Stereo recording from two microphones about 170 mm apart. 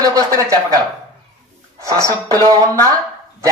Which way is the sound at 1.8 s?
20° right (ahead or behind).